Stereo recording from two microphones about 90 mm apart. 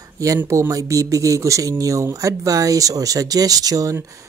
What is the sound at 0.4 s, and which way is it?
Speech, 35° right (ahead or behind).